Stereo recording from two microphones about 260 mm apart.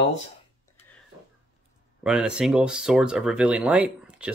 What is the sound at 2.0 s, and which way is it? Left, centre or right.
Speech, centre.